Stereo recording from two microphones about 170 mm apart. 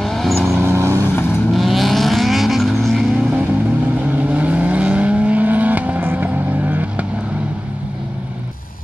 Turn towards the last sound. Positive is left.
turn(degrees=-5)  # may be behind; listen again after turning